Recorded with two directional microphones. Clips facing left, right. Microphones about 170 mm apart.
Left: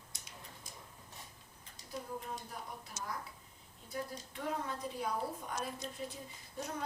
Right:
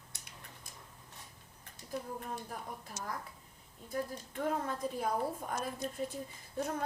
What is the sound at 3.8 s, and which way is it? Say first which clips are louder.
A woman's voice: right 4 dB; 50° right (ahead or behind).